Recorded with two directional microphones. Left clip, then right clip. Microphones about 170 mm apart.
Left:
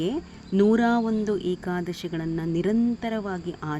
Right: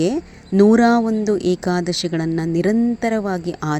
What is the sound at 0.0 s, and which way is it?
Speech, 30° right (ahead or behind).